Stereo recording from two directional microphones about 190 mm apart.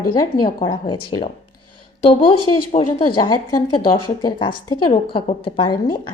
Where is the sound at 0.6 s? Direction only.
25° left (ahead or behind).